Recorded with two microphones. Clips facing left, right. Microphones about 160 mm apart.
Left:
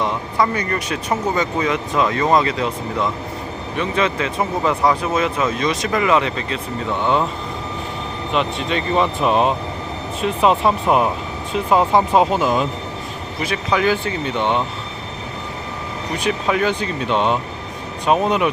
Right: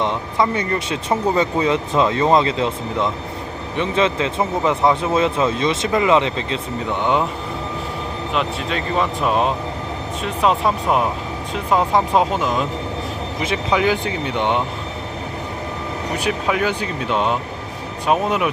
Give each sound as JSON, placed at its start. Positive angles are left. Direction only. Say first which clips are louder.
{"t": 0.0, "sound": "speech", "louder": "even", "side_deg": -25}
{"t": 8.3, "sound": "speech", "louder": "left 3 dB", "side_deg": 0}
{"t": 13.4, "sound": "speech", "louder": "even", "side_deg": -20}
{"t": 16.1, "sound": "speech", "louder": "left 1 dB", "side_deg": -10}